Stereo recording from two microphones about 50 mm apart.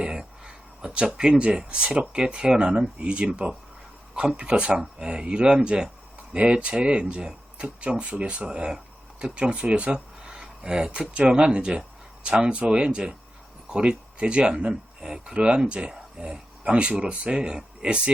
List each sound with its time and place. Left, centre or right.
0.0 s speech: centre